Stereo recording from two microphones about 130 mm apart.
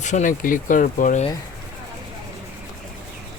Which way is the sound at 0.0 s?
70° left (ahead or behind).